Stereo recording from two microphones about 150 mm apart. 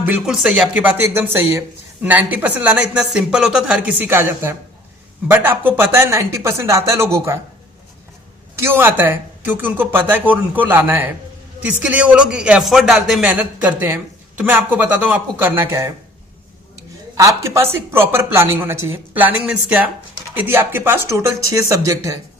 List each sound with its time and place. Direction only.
0.0 s speech: 5° right (ahead or behind)
8.5 s speech: 15° right (ahead or behind)
17.2 s speech: 20° right (ahead or behind)